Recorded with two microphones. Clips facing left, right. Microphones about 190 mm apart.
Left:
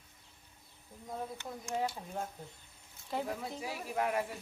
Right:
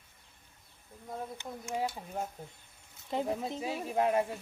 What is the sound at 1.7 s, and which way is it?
Speech, 10° right (ahead or behind).